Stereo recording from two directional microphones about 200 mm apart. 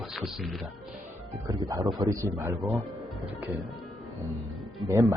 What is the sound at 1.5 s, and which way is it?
Speech, 20° right (ahead or behind).